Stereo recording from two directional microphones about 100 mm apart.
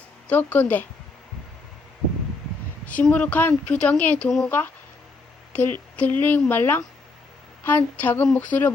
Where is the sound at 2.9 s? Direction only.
15° left (ahead or behind).